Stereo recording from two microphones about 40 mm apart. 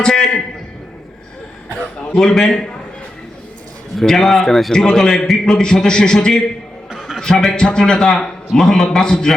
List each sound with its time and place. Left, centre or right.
0.0 s a man's voice: centre
2.1 s a man's voice: centre
4.1 s a man's voice: centre
4.7 s a man's voice: centre
9.0 s a man's voice: centre